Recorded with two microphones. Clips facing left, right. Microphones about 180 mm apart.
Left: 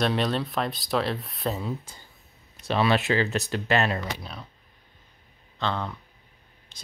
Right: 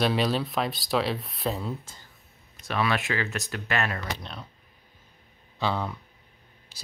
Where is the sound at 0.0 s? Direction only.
Centre (ahead or behind).